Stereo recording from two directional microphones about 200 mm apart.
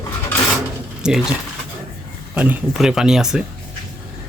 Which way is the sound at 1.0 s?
5° right (ahead or behind).